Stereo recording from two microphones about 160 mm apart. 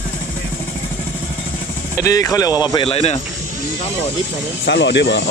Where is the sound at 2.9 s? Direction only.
40° left (ahead or behind).